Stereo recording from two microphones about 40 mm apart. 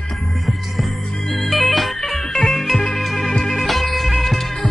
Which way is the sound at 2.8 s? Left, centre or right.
Centre.